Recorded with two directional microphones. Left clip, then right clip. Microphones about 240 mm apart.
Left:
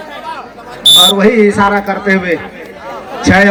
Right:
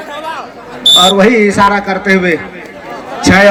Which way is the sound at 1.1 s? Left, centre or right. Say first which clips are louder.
Right 1 dB; right.